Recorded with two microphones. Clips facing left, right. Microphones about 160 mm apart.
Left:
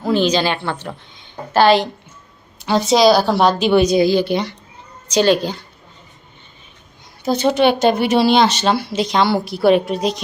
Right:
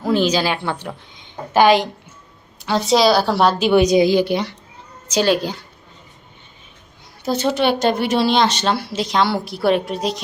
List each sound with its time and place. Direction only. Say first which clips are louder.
0.0 s a woman's voice: left 1 dB; 5° right (ahead or behind)
2.6 s a woman's voice: left 2 dB; centre (ahead or behind)
7.3 s speech: left 3 dB; centre (ahead or behind)